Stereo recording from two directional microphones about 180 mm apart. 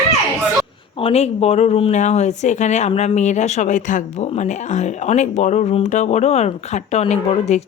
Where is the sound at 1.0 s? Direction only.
35° left (ahead or behind).